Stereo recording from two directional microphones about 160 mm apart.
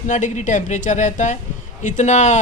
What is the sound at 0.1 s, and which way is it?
Speech, 50° left (ahead or behind).